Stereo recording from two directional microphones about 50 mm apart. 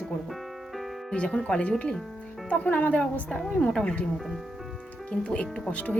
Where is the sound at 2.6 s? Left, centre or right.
Left.